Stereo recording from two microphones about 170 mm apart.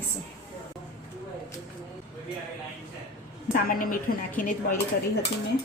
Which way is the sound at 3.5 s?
55° left (ahead or behind).